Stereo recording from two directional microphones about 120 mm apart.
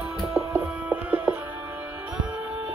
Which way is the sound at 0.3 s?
15° right (ahead or behind).